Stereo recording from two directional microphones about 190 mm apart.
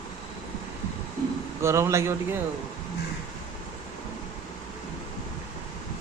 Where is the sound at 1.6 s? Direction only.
15° right (ahead or behind).